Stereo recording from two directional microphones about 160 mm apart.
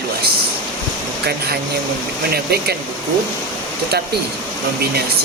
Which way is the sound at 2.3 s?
80° right.